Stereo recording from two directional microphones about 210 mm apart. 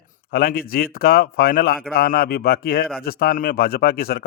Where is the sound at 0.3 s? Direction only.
45° left (ahead or behind).